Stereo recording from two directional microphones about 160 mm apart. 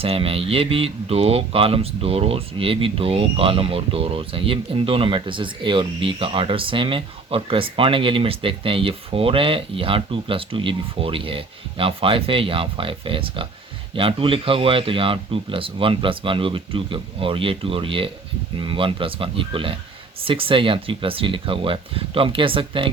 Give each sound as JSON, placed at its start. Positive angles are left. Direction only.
{"t": 0.0, "sound": "speech", "side_deg": -35}